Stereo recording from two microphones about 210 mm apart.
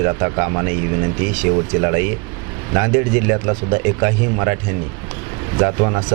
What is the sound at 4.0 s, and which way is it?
Speech, 20° right (ahead or behind).